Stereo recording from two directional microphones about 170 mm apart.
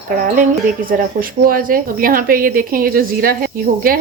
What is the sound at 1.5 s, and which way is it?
A woman's voice, 55° right (ahead or behind).